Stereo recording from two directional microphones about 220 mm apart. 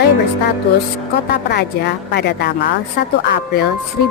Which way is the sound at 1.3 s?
50° left (ahead or behind).